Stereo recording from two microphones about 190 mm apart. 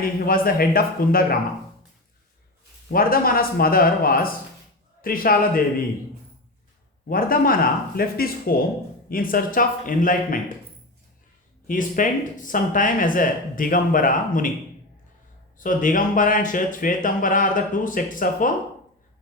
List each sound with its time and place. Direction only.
0.3 s speech: 50° left (ahead or behind)
2.9 s speech: 50° left (ahead or behind)
7.1 s speech: 50° left (ahead or behind)
11.7 s speech: 45° left (ahead or behind)
15.5 s speech: 45° left (ahead or behind)